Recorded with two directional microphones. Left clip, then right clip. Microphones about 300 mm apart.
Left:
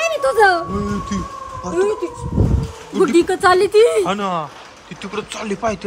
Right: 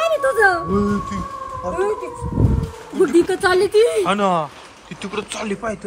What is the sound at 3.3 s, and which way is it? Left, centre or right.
Speech, centre.